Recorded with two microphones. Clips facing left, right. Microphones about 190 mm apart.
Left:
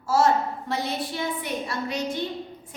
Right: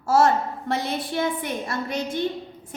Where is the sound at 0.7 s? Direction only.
50° right (ahead or behind).